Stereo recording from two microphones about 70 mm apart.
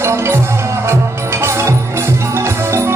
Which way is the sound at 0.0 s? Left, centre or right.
Right.